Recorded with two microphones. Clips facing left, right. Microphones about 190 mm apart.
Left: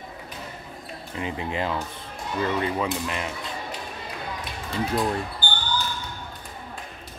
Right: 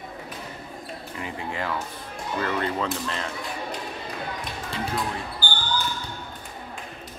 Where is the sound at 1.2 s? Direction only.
20° left (ahead or behind).